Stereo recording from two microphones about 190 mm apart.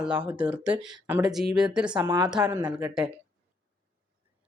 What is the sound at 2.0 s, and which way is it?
Speech, 20° right (ahead or behind).